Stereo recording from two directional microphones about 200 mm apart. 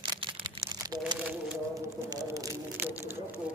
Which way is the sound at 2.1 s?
15° right (ahead or behind).